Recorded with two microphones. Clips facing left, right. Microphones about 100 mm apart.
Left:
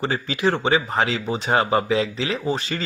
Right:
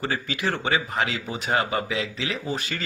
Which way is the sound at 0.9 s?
35° left (ahead or behind).